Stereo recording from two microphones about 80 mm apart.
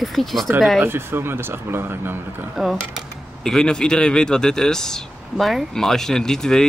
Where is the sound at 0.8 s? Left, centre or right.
Right.